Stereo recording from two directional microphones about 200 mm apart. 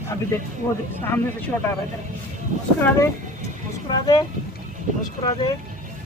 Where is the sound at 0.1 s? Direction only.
15° left (ahead or behind).